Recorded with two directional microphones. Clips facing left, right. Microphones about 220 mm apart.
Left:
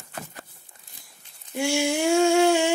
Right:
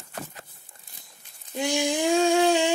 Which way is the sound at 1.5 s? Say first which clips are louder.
Left 2 dB; 15° right (ahead or behind).